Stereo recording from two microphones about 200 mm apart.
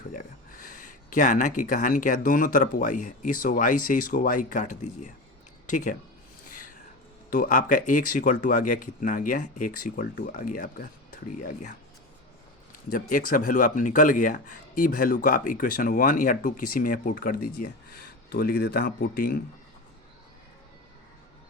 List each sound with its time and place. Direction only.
0.1 s speech: 40° left (ahead or behind)
7.3 s speech: 40° left (ahead or behind)
12.9 s speech: 40° left (ahead or behind)